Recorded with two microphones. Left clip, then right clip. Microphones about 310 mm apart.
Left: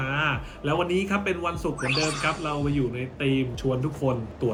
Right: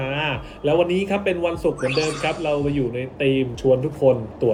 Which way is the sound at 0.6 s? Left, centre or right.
Centre.